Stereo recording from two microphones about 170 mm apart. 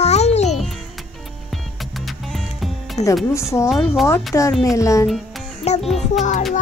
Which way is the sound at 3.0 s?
20° left (ahead or behind).